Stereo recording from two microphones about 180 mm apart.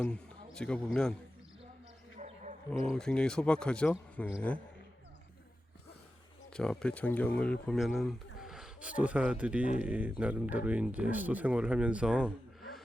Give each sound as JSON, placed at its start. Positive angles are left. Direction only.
{"t": 0.0, "sound": "a man's voice", "side_deg": 5}
{"t": 2.1, "sound": "a sound", "side_deg": -40}
{"t": 2.9, "sound": "speech", "side_deg": 5}
{"t": 6.5, "sound": "speech", "side_deg": 5}